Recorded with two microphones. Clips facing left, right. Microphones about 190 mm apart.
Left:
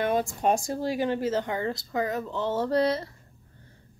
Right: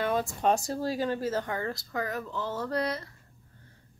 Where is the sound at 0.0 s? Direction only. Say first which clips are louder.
Left 2 dB; 15° left (ahead or behind).